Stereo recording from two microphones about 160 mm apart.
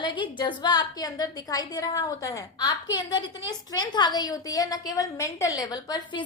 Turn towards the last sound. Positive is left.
turn(degrees=25)  # may be behind; listen again after turning